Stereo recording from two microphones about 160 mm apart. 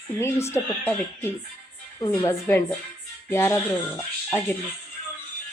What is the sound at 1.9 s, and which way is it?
Speech, 25° left (ahead or behind).